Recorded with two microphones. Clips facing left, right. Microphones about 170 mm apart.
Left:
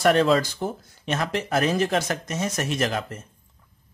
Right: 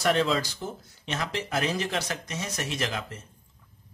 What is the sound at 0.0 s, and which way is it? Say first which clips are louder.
Speech: left 6 dB; 55° left (ahead or behind).